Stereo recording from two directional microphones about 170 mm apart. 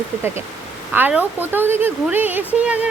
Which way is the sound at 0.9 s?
10° right (ahead or behind).